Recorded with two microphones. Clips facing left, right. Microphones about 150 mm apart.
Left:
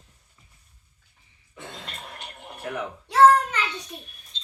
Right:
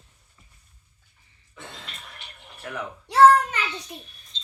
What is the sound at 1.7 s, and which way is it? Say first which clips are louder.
Music: left 4 dB; 45° left (ahead or behind).